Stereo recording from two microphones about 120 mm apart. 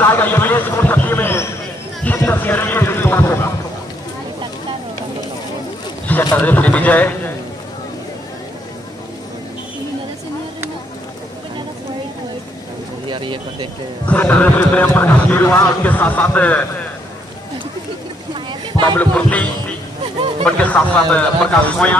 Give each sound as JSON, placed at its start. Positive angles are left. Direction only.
{"t": 0.0, "sound": "a man's voice", "side_deg": 15}
{"t": 6.3, "sound": "a man's voice", "side_deg": 15}
{"t": 13.1, "sound": "speech", "side_deg": -45}
{"t": 14.0, "sound": "a man's voice", "side_deg": 15}
{"t": 18.9, "sound": "a man's voice", "side_deg": 15}
{"t": 20.2, "sound": "a sound", "side_deg": -45}
{"t": 20.4, "sound": "a man's voice", "side_deg": 10}